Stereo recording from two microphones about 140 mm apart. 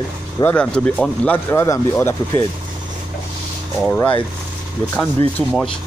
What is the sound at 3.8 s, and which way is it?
Speech, 10° left (ahead or behind).